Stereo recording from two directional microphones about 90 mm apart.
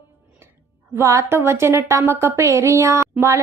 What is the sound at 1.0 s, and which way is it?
Speech, 35° right (ahead or behind).